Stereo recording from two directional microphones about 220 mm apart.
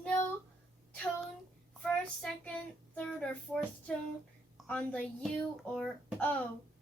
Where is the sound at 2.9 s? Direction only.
5° left (ahead or behind).